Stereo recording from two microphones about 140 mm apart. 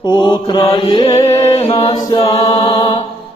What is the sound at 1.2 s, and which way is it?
Music, 25° left (ahead or behind).